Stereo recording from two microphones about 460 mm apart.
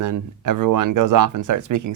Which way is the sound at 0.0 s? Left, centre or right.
Right.